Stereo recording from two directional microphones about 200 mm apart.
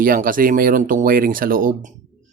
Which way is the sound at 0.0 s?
45° right (ahead or behind).